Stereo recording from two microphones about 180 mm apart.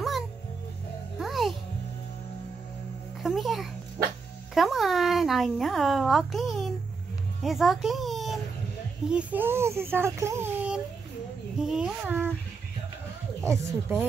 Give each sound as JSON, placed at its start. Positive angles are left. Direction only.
{"t": 1.1, "sound": "music", "side_deg": 0}
{"t": 3.2, "sound": "music", "side_deg": 0}
{"t": 4.6, "sound": "a sound", "side_deg": 0}
{"t": 7.4, "sound": "a child's voice", "side_deg": 0}
{"t": 13.5, "sound": "speech", "side_deg": -15}